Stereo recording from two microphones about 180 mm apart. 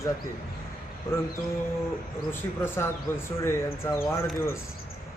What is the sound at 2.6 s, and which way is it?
Music, 15° left (ahead or behind).